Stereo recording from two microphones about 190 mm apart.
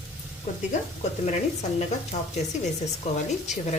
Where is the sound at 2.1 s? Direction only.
35° left (ahead or behind).